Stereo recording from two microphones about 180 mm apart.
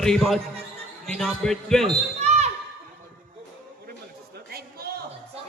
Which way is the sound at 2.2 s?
40° right (ahead or behind).